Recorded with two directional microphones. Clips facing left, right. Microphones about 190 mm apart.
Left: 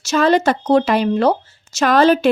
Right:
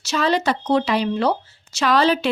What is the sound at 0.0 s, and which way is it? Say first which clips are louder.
A woman's voice: left 6 dB; 50° left (ahead or behind).